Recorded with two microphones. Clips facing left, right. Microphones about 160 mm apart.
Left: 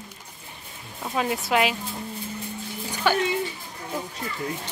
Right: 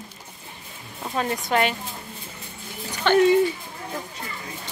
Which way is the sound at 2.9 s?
10° left (ahead or behind).